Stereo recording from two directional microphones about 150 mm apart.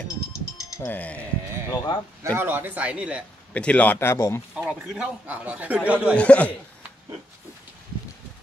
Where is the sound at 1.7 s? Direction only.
25° left (ahead or behind).